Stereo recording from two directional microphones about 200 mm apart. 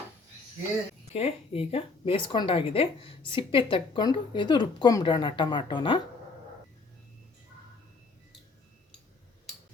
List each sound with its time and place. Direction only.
1.1 s a woman's voice: 30° left (ahead or behind)